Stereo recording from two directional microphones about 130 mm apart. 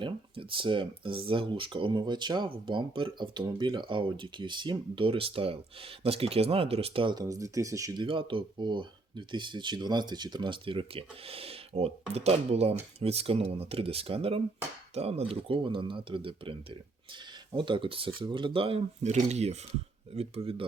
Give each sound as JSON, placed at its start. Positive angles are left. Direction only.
{"t": 0.0, "sound": "speech", "side_deg": -40}
{"t": 8.0, "sound": "speech", "side_deg": -40}
{"t": 19.0, "sound": "speech", "side_deg": -60}